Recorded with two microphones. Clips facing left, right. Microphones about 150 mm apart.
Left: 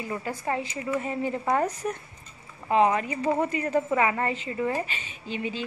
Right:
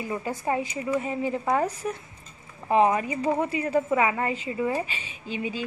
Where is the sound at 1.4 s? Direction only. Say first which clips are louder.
Left 1 dB; 5° right (ahead or behind).